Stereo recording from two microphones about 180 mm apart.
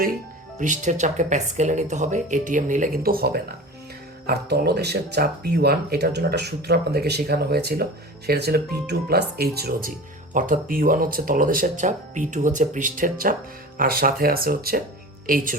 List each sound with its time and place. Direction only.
0.6 s speech: 45° right (ahead or behind); by 9.9 s 60° right (ahead or behind)
10.3 s speech: 45° right (ahead or behind)